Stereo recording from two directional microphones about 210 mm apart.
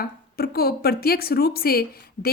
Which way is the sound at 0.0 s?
45° left (ahead or behind).